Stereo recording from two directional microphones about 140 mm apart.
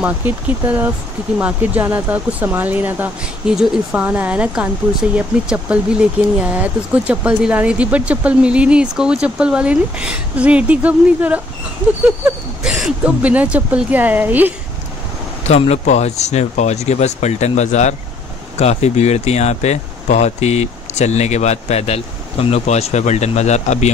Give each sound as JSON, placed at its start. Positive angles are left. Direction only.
{"t": 0.0, "sound": "speech", "side_deg": -10}
{"t": 12.2, "sound": "a sound", "side_deg": -5}
{"t": 12.6, "sound": "speech", "side_deg": -5}
{"t": 15.4, "sound": "speech", "side_deg": 50}